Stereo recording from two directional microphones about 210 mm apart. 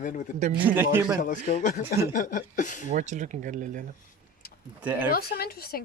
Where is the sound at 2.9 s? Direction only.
35° right (ahead or behind).